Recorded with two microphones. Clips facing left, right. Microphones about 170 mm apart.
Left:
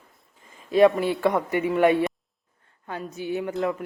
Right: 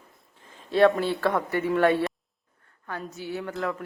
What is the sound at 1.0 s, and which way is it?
Speech, 20° left (ahead or behind).